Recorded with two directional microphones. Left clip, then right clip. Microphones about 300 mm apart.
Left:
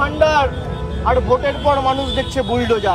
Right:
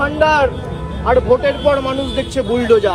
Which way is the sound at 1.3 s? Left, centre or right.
Centre.